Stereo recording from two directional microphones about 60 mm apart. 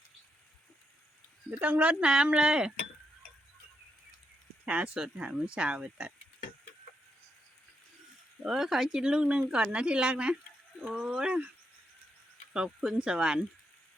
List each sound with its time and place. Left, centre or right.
1.6 s a woman's voice: right
4.6 s a woman's voice: centre
8.4 s a woman's voice: centre
12.5 s a woman's voice: centre